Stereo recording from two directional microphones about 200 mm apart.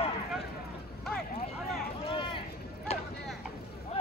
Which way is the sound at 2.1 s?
25° left (ahead or behind).